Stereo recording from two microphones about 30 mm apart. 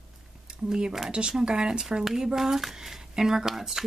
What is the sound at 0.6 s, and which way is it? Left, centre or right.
Speech, centre.